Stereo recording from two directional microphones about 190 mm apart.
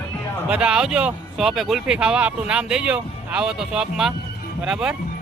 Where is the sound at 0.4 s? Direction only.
5° right (ahead or behind).